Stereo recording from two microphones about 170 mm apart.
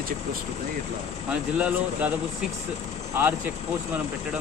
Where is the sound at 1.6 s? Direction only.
5° right (ahead or behind).